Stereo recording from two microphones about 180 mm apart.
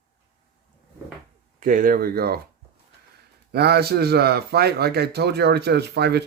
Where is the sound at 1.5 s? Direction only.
50° right (ahead or behind).